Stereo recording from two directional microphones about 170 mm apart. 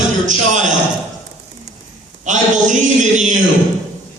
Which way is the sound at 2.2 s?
45° right (ahead or behind).